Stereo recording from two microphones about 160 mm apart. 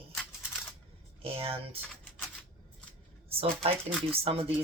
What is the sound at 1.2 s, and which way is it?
Speech, 35° right (ahead or behind).